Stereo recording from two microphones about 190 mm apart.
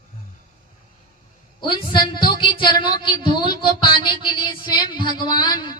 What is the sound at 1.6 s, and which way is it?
A woman's voice, 25° left (ahead or behind).